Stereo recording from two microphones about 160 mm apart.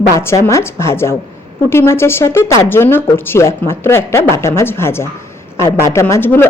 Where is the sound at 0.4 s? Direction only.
15° left (ahead or behind).